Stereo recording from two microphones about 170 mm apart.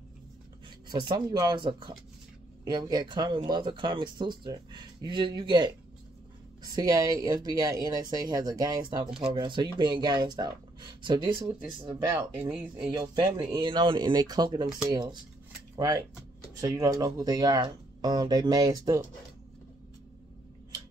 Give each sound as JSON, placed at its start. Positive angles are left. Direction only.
{"t": 0.8, "sound": "speech", "side_deg": -25}